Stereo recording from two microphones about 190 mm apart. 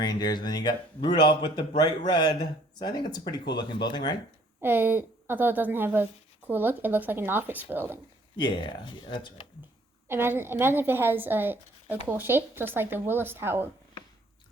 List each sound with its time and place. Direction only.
0.0 s speech: 20° left (ahead or behind)
4.6 s a woman's voice: 10° right (ahead or behind)
8.4 s speech: 25° left (ahead or behind)
10.1 s a woman's voice: 10° right (ahead or behind)